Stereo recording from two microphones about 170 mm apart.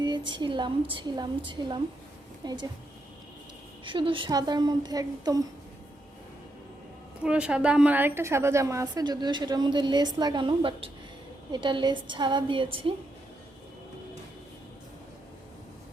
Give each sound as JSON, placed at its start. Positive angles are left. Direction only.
{"t": 0.0, "sound": "a woman's voice", "side_deg": -25}
{"t": 3.8, "sound": "a woman's voice", "side_deg": -30}
{"t": 7.3, "sound": "a woman's voice", "side_deg": -5}